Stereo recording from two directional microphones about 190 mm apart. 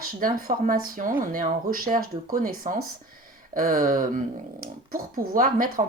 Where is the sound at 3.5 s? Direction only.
45° right (ahead or behind).